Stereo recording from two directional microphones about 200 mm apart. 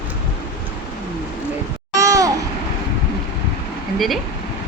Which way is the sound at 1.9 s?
15° right (ahead or behind).